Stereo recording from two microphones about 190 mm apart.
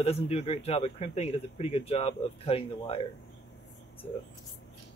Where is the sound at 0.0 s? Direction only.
30° left (ahead or behind).